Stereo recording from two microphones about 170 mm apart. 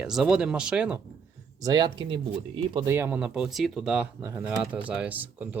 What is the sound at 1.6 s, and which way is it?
Speech, 25° right (ahead or behind).